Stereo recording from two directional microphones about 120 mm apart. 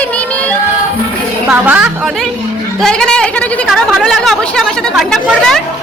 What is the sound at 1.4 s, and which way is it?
Music, 15° right (ahead or behind).